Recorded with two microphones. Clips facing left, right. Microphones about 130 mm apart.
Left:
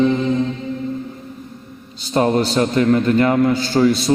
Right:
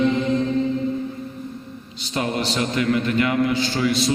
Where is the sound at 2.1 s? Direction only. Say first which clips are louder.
Left 8 dB; 40° left (ahead or behind).